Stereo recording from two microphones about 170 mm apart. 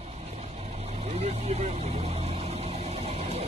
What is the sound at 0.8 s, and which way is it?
Vehicle, 40° right (ahead or behind).